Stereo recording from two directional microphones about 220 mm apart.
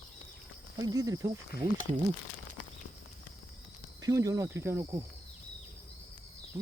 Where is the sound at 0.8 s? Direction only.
15° right (ahead or behind).